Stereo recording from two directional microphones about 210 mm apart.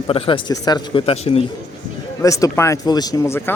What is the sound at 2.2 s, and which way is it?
Speech, 15° left (ahead or behind).